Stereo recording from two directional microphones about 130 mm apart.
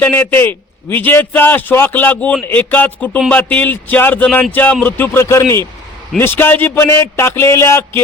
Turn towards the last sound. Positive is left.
turn(degrees=20)  # may be behind; listen again after turning